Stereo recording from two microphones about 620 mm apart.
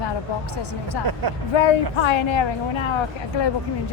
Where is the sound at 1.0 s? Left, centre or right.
Right.